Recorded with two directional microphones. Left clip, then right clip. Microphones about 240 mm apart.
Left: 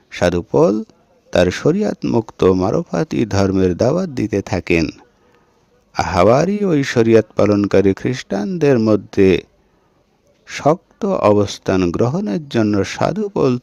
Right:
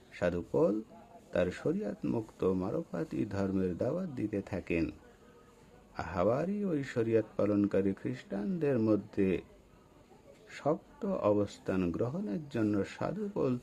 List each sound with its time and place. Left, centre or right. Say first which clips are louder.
0.1 s speech: left 16 dB; left
10.4 s speech: left 17 dB; left